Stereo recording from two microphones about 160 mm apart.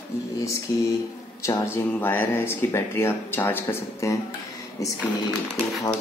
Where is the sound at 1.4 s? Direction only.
20° left (ahead or behind).